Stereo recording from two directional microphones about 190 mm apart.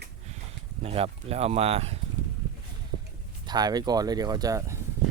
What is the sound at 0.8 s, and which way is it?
Speech, 30° right (ahead or behind).